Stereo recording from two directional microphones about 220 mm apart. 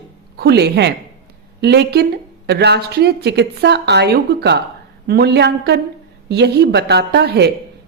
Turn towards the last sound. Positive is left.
turn(degrees=-50)  # may be behind; listen again after turning